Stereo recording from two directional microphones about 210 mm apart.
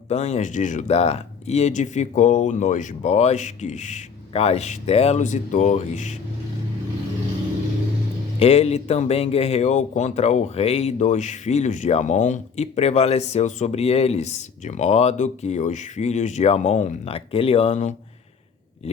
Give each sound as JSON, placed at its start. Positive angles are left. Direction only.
{"t": 0.1, "sound": "a man's voice", "side_deg": 30}
{"t": 8.4, "sound": "a man's voice", "side_deg": 30}